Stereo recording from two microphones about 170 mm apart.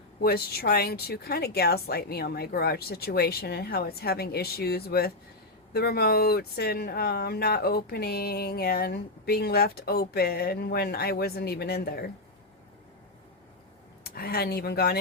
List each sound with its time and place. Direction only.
0.2 s speech: 65° left (ahead or behind)
14.0 s speech: 65° left (ahead or behind)